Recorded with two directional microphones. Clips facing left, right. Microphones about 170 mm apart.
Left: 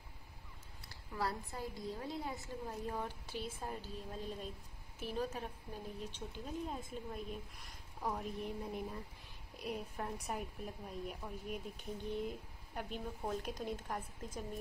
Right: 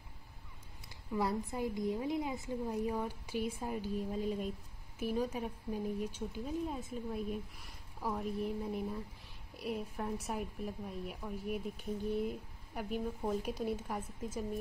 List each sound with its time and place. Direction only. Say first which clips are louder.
0.8 s a woman's voice: right 5 dB; 20° right (ahead or behind)